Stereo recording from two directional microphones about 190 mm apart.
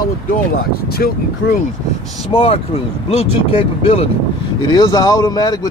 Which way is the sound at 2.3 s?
30° left (ahead or behind).